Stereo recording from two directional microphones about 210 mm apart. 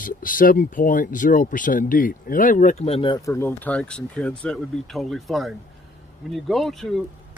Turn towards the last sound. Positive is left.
turn(degrees=0)  # may be behind; listen again after turning